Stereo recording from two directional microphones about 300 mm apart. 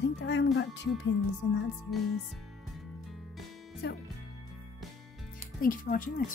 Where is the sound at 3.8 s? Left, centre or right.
Left.